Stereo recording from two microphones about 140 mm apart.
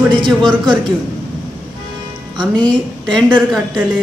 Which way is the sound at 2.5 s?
5° left (ahead or behind).